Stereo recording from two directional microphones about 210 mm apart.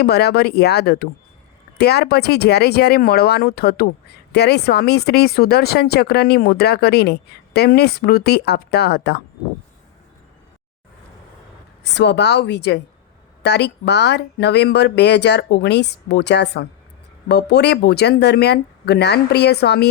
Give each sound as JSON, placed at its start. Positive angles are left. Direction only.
{"t": 0.0, "sound": "speech", "side_deg": 50}
{"t": 11.8, "sound": "speech", "side_deg": 55}